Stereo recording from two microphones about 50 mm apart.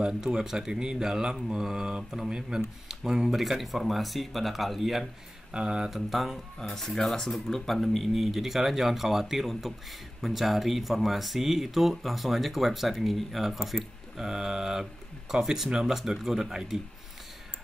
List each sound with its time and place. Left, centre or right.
0.0 s speech: centre
5.5 s speech: centre
5.9 s speech: centre